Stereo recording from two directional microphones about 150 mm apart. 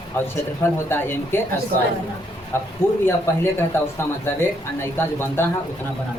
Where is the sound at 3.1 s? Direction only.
15° left (ahead or behind).